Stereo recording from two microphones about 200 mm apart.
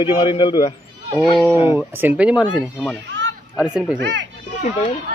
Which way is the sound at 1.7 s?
10° right (ahead or behind).